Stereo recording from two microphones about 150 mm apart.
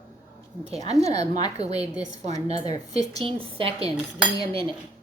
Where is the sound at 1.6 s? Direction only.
45° right (ahead or behind).